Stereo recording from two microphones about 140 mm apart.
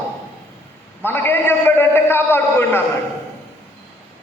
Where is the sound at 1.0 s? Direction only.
15° left (ahead or behind).